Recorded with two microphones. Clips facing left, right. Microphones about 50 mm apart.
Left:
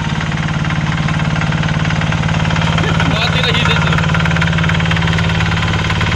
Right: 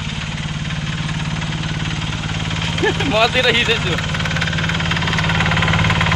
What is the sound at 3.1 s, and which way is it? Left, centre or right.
Vehicle, centre.